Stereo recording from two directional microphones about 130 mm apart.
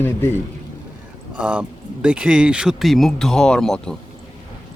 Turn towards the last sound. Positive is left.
turn(degrees=5)  # may be behind; listen again after turning